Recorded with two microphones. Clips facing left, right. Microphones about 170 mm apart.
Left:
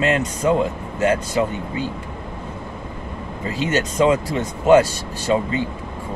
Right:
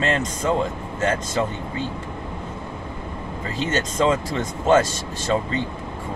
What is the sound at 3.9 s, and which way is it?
Speech, 15° left (ahead or behind).